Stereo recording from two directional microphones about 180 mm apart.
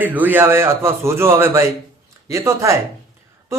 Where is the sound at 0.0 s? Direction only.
10° right (ahead or behind).